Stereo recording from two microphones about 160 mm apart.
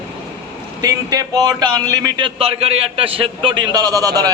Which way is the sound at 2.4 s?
40° right (ahead or behind).